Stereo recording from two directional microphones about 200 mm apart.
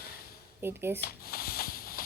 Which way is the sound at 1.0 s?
50° left (ahead or behind).